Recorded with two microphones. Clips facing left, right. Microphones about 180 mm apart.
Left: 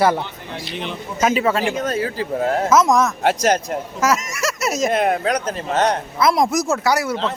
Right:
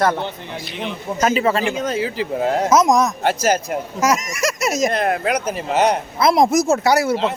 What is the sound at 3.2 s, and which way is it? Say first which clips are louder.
Speech: left 1 dB; 5° right (ahead or behind).